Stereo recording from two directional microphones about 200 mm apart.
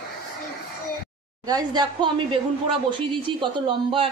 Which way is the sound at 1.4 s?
20° right (ahead or behind).